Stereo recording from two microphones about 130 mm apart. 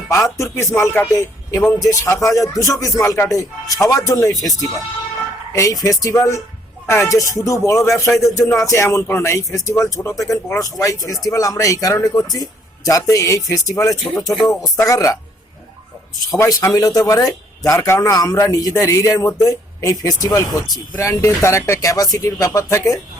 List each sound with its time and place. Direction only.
0.1 s a man's voice: 25° left (ahead or behind)
5.5 s a man's voice: 25° left (ahead or behind)
16.3 s a man's voice: 25° left (ahead or behind)